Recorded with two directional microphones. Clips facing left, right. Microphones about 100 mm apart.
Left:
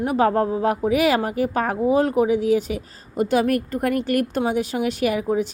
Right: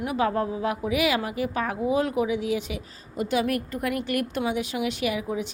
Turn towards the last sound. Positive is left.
turn(degrees=45)  # may be behind; listen again after turning